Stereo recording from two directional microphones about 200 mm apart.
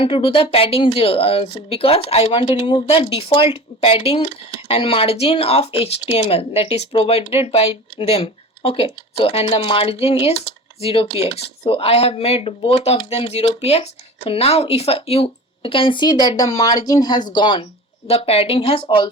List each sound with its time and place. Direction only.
0.0 s speech: 25° left (ahead or behind)